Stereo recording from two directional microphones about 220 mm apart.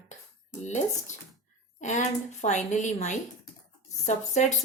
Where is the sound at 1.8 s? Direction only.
35° left (ahead or behind).